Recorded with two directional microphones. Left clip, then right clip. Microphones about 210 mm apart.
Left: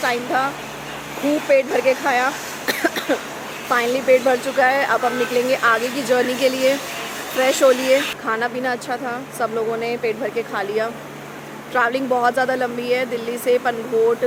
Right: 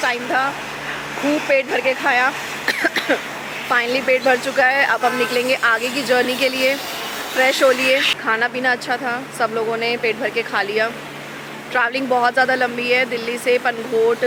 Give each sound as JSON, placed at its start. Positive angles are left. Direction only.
{"t": 0.0, "sound": "speech", "side_deg": 5}
{"t": 1.2, "sound": "speech", "side_deg": -20}
{"t": 1.5, "sound": "speech", "side_deg": 5}